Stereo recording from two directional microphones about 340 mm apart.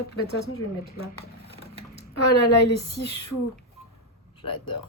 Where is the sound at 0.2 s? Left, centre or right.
Left.